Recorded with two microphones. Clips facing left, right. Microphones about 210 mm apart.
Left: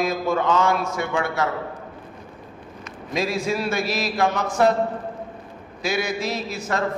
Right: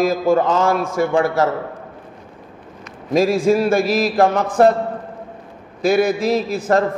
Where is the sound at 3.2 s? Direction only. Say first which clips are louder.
Right 9 dB; 45° right (ahead or behind).